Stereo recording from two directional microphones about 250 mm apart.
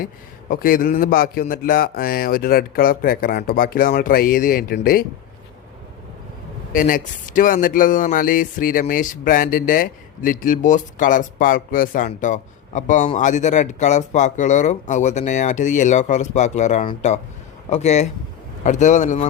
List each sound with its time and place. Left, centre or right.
0.5 s speech: left
6.7 s a man's voice: left